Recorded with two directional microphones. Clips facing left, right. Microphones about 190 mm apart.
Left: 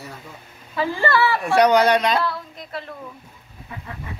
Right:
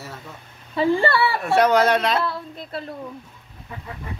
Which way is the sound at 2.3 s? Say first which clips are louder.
Even; 30° right (ahead or behind).